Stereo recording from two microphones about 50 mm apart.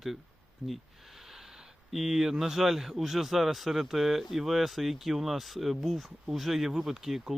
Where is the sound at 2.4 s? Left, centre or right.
Centre.